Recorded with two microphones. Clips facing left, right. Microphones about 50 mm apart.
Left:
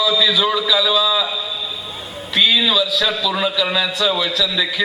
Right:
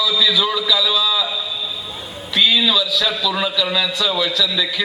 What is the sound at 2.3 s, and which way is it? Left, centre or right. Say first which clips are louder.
A man's voice: even; centre.